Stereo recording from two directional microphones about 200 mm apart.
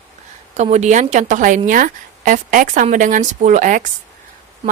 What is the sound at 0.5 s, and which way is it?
A woman's voice, 35° right (ahead or behind).